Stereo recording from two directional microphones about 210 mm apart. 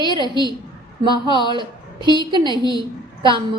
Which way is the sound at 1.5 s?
20° right (ahead or behind).